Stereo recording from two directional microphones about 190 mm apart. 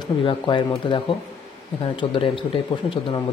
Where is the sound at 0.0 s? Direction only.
25° left (ahead or behind).